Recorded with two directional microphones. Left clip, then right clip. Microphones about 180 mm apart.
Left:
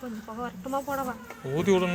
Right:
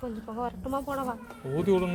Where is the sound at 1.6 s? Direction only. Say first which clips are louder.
Left 2 dB; 5° right (ahead or behind).